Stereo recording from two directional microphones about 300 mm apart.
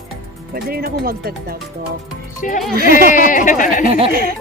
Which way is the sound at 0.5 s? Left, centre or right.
Right.